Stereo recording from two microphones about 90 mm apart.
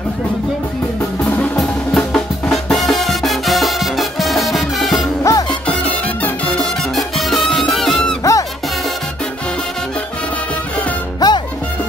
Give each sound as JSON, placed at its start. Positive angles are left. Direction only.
{"t": 1.6, "sound": "music", "side_deg": 5}
{"t": 5.3, "sound": "music", "side_deg": 35}
{"t": 5.7, "sound": "music", "side_deg": 15}
{"t": 8.2, "sound": "music", "side_deg": 40}
{"t": 11.1, "sound": "music", "side_deg": 55}